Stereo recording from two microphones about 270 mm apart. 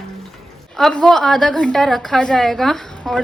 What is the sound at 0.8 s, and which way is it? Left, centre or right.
A woman's voice, centre.